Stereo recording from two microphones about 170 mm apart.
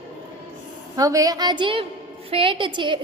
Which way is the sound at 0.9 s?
20° right (ahead or behind).